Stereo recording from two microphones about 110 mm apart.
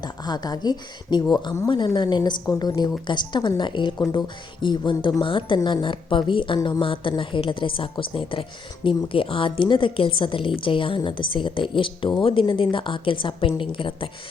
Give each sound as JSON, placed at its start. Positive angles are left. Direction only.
{"t": 0.0, "sound": "a woman's voice", "side_deg": 40}